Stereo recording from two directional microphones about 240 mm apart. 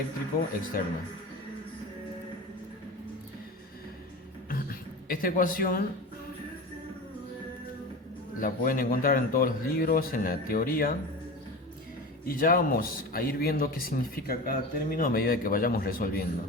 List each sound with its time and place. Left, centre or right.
0.7 s speech: left
4.4 s beatboxing: left
8.4 s speech: left
12.2 s speech: left